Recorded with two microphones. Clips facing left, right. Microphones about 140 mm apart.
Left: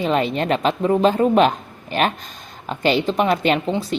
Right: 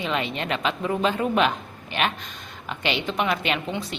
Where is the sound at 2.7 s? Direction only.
40° left (ahead or behind).